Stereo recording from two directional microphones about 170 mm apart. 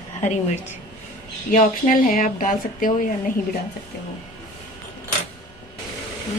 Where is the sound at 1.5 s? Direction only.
50° left (ahead or behind).